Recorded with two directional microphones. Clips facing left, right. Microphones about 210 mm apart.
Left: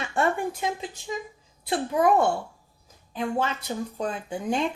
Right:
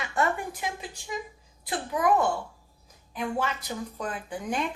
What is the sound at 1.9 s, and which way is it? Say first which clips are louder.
A woman's voice: left 3 dB; 30° left (ahead or behind).